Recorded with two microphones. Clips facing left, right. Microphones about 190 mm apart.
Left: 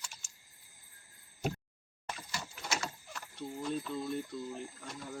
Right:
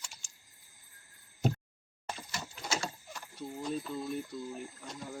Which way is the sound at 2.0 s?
25° right (ahead or behind).